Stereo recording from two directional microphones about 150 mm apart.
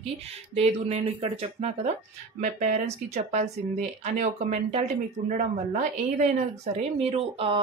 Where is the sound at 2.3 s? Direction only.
55° right (ahead or behind).